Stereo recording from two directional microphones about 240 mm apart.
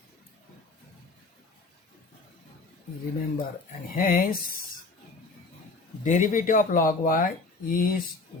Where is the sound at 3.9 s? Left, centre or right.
Left.